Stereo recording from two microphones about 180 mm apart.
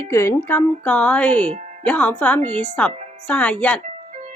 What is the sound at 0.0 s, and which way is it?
Speech, 15° left (ahead or behind).